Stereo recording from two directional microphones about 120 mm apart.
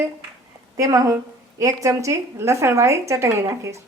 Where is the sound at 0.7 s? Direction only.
30° right (ahead or behind).